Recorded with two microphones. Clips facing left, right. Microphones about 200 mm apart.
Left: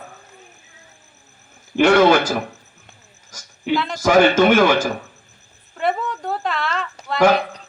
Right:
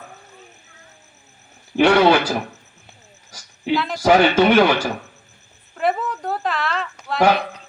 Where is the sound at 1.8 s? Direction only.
45° left (ahead or behind).